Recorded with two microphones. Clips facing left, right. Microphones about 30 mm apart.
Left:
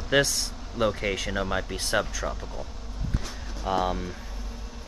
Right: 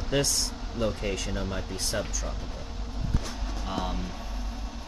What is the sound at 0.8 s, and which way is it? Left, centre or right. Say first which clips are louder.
Speech: left 4 dB; left.